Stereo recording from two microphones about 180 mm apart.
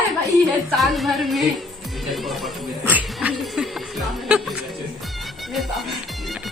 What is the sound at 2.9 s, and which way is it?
Music, 10° right (ahead or behind).